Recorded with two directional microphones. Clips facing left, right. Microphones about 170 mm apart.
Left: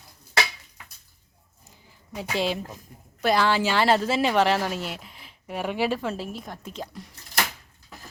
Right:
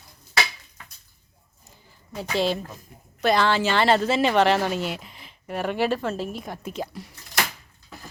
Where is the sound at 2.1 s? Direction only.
10° left (ahead or behind).